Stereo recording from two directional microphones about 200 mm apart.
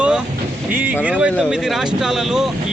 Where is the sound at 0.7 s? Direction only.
10° right (ahead or behind).